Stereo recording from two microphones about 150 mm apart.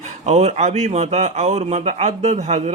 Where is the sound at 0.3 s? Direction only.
45° right (ahead or behind).